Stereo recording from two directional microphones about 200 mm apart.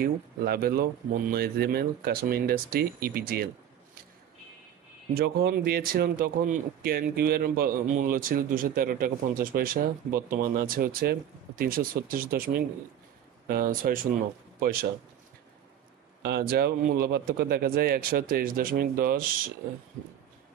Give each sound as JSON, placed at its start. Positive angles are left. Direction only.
{"t": 0.0, "sound": "speech", "side_deg": -50}
{"t": 5.1, "sound": "speech", "side_deg": -50}
{"t": 16.2, "sound": "speech", "side_deg": -55}